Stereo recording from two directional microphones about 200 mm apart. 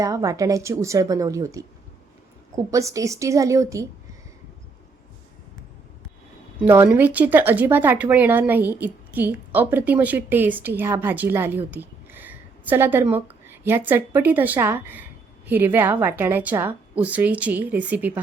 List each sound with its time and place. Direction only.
0.0 s speech: 15° right (ahead or behind)
2.6 s speech: 15° right (ahead or behind)
6.7 s speech: 10° right (ahead or behind)